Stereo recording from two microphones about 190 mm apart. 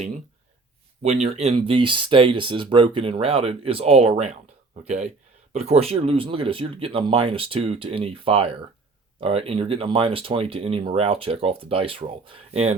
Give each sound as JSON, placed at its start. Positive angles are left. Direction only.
{"t": 1.0, "sound": "speech", "side_deg": -35}